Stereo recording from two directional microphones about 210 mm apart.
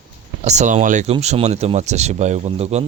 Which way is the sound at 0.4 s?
35° right (ahead or behind).